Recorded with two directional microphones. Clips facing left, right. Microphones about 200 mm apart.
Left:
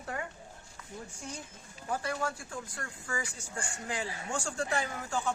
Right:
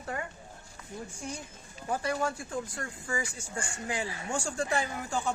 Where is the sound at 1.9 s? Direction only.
15° right (ahead or behind).